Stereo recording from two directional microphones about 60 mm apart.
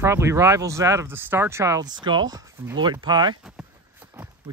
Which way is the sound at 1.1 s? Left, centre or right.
Right.